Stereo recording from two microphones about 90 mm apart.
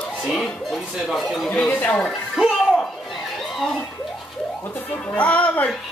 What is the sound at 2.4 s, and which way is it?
Music, 5° right (ahead or behind).